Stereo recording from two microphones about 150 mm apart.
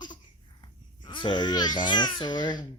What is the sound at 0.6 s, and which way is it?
Babbling, 30° left (ahead or behind).